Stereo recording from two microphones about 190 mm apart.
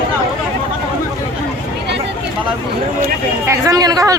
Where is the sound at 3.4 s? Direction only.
15° right (ahead or behind).